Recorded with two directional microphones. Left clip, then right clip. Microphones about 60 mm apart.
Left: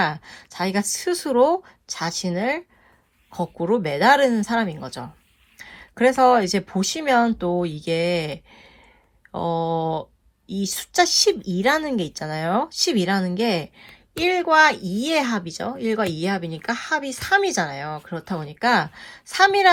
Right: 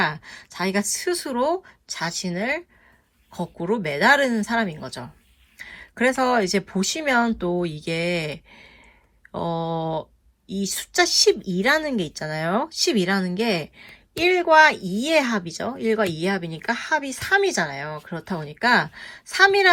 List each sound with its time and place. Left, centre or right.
0.0 s speech: left